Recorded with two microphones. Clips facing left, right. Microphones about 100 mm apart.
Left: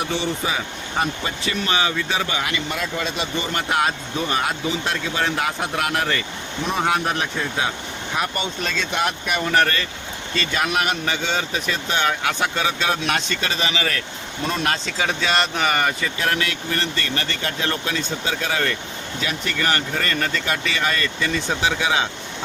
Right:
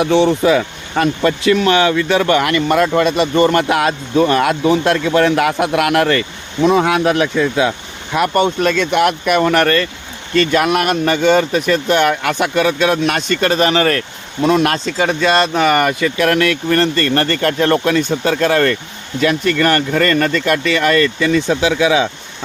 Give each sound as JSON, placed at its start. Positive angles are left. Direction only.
{"t": 0.0, "sound": "speech", "side_deg": -70}
{"t": 6.7, "sound": "speech", "side_deg": -90}
{"t": 8.3, "sound": "speech", "side_deg": -60}
{"t": 14.4, "sound": "speech", "side_deg": -70}